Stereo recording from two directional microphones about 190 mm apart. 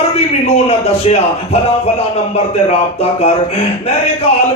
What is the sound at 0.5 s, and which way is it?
Speech, 35° left (ahead or behind).